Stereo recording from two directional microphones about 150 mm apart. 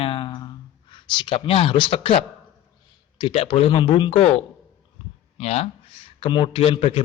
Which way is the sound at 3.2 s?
40° left (ahead or behind).